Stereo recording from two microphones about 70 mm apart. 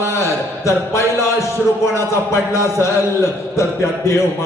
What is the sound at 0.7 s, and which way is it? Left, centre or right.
Speech, left.